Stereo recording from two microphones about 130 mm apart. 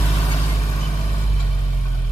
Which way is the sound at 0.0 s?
20° left (ahead or behind).